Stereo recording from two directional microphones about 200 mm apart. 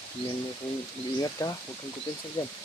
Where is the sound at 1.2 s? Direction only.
15° left (ahead or behind).